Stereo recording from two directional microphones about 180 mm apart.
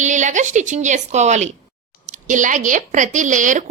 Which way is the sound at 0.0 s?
45° right (ahead or behind).